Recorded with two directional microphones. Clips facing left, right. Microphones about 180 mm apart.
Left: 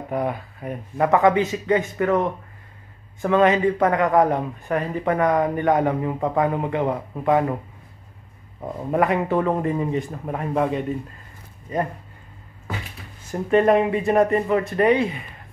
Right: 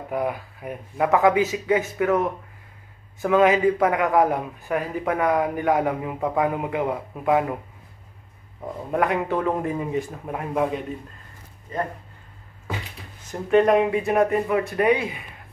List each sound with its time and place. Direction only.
0.1 s a man's voice: 5° right (ahead or behind)
8.9 s a man's voice: centre (ahead or behind)
13.3 s a man's voice: centre (ahead or behind)